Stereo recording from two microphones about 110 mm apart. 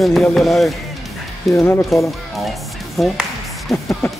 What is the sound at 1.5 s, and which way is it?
Speech, 20° left (ahead or behind).